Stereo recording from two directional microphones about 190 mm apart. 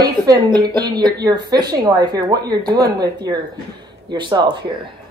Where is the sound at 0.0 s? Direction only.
20° right (ahead or behind).